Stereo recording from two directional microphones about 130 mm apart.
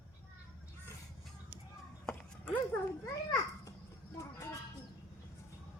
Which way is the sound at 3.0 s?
25° left (ahead or behind).